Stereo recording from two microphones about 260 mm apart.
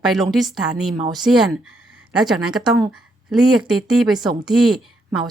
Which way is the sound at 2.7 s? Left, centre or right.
Centre.